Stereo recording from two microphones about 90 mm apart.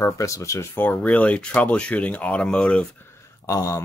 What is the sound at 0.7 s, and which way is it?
Speech, 15° left (ahead or behind).